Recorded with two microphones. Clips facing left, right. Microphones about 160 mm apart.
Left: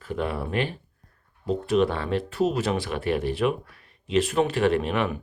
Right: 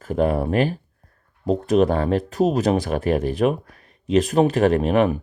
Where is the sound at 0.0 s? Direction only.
45° right (ahead or behind).